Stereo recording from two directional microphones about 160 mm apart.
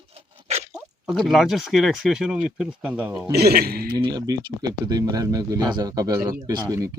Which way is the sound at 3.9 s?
25° right (ahead or behind).